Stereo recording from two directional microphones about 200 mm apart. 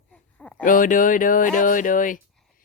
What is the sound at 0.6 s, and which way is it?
Speech, 40° left (ahead or behind).